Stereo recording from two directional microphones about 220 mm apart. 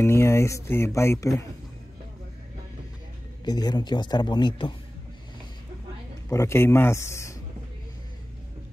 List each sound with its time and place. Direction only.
0.0 s speech: 10° left (ahead or behind)
3.4 s a man's voice: 20° left (ahead or behind)
6.2 s speech: 10° left (ahead or behind)